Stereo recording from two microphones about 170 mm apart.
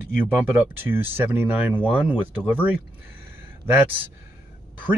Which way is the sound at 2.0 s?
10° right (ahead or behind).